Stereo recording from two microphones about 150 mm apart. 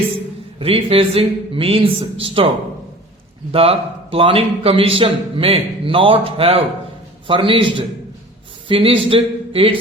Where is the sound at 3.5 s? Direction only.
40° right (ahead or behind).